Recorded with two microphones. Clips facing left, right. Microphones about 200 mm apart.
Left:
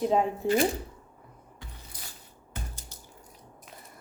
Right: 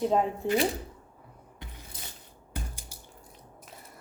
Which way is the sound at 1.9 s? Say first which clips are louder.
Right 3 dB; 25° right (ahead or behind).